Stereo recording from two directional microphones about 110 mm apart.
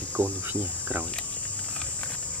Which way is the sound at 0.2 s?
20° right (ahead or behind).